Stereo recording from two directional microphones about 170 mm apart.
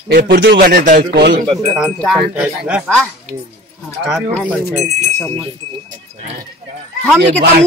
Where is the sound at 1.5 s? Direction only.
5° right (ahead or behind).